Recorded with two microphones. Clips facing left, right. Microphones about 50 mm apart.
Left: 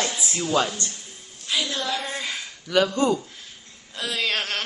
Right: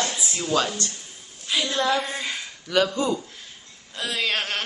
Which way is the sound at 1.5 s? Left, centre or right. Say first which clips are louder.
Right 2 dB; centre.